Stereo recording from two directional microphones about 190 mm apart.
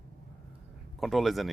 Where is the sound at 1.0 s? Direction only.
Centre (ahead or behind).